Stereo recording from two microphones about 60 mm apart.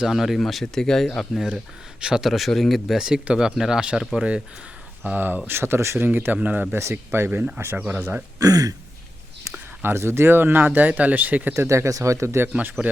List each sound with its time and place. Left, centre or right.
0.1 s speech: centre
2.0 s speech: centre
3.1 s speech: centre
5.0 s speech: right
5.5 s speech: right
6.1 s speech: right
6.9 s speech: right
7.8 s speech: centre
8.4 s speech: right
9.8 s speech: right
11.5 s speech: right